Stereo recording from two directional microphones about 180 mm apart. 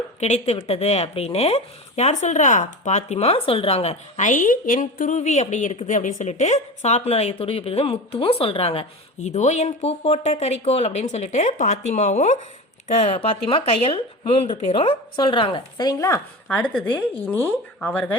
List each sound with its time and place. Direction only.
0.2 s a woman's voice: 40° left (ahead or behind); by 18.2 s 10° left (ahead or behind)